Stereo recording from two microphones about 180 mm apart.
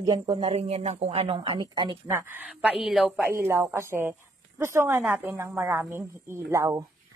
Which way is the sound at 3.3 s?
15° right (ahead or behind).